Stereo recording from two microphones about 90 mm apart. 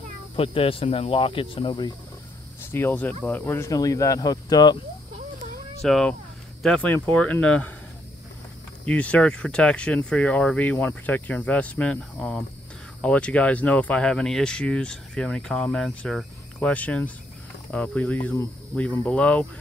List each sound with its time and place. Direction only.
0.4 s speech: 90° left; by 1.9 s 75° left (ahead or behind)
2.6 s speech: 25° left (ahead or behind)
3.7 s speech: 40° left (ahead or behind)
5.8 s speech: 5° left (ahead or behind)
6.8 s speech: 15° left (ahead or behind)
8.8 s speech: 15° left (ahead or behind)